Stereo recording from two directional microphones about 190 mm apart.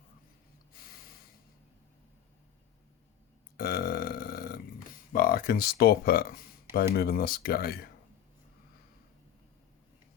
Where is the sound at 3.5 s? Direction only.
55° left (ahead or behind).